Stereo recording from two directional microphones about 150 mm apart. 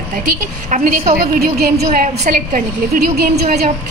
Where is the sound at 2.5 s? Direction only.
75° right (ahead or behind).